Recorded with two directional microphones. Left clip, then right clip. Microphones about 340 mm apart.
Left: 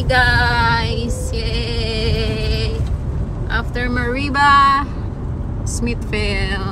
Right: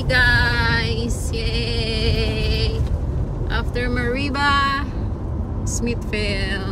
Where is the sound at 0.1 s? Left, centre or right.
Centre.